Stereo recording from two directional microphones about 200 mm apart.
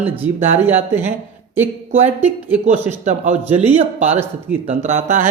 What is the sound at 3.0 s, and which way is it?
Speech, 35° right (ahead or behind).